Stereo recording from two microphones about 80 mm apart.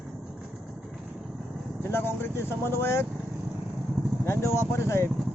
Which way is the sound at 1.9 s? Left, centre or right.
Left.